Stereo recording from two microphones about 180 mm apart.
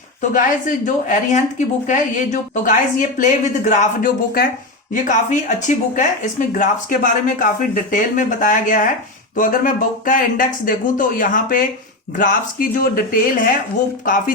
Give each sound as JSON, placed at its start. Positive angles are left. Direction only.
{"t": 0.2, "sound": "speech", "side_deg": 45}